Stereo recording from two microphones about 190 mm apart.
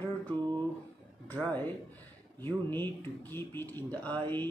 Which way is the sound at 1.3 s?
10° left (ahead or behind).